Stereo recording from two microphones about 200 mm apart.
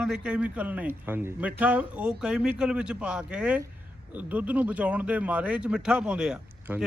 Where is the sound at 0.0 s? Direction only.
5° right (ahead or behind).